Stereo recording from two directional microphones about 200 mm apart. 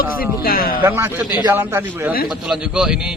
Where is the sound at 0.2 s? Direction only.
45° left (ahead or behind).